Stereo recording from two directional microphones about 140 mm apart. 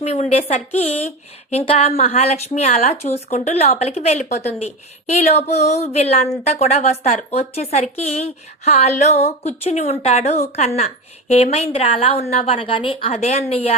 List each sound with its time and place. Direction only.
0.0 s speech: 50° left (ahead or behind)